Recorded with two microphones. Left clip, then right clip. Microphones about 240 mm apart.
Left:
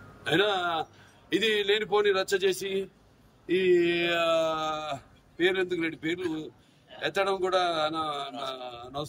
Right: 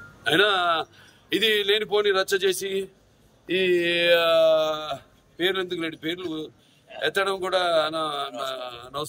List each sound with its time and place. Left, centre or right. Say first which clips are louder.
0.2 s speech: right 5 dB; centre